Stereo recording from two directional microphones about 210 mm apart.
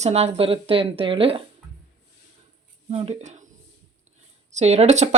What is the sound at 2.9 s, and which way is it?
Speech, 30° right (ahead or behind).